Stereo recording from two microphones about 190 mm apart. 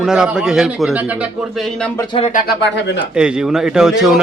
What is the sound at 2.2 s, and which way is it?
Speech, 35° left (ahead or behind).